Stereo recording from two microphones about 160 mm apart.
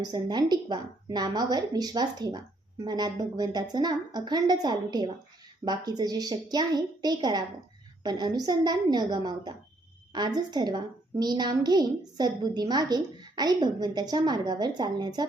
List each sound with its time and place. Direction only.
0.0 s a woman's voice: 25° right (ahead or behind)